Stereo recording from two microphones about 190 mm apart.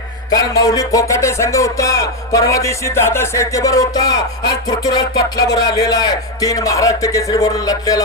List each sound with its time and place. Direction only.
0.3 s music: 20° left (ahead or behind)